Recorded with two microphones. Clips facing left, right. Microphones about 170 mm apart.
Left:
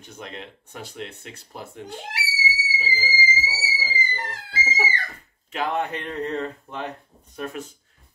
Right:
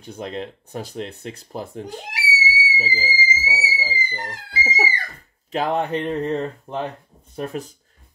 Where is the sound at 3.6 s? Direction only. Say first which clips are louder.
Right 2 dB; 10° right (ahead or behind).